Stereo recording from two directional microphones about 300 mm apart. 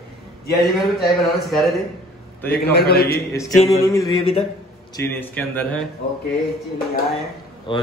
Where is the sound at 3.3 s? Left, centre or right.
Centre.